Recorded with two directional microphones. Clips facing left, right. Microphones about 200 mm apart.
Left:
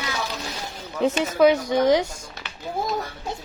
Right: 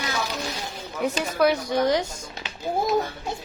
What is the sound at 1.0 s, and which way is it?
A woman's voice, 25° left (ahead or behind).